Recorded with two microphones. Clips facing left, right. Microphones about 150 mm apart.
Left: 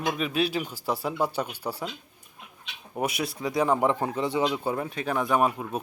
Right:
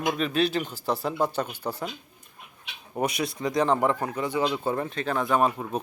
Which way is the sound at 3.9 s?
25° left (ahead or behind).